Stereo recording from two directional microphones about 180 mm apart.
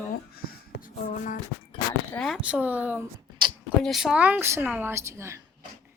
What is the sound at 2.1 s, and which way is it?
A woman's voice, centre (ahead or behind).